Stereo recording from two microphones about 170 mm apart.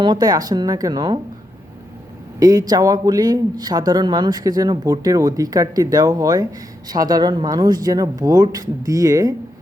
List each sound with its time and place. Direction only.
0.0 s speech: 25° right (ahead or behind)
2.4 s speech: 20° right (ahead or behind)